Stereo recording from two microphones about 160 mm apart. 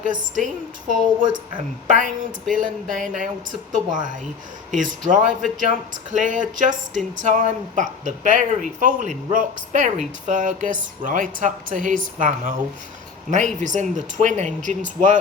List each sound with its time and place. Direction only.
0.0 s speech: 55° right (ahead or behind)
1.2 s speech: 30° right (ahead or behind)
1.9 s speech: 50° right (ahead or behind)